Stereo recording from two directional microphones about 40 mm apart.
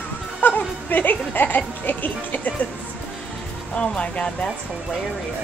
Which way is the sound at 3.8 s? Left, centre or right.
Left.